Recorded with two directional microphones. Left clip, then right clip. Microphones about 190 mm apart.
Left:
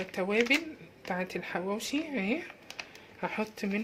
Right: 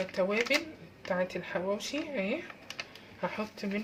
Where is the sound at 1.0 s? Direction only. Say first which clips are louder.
Right 2 dB; 50° left (ahead or behind).